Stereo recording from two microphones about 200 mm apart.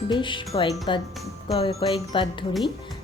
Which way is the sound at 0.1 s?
25° left (ahead or behind).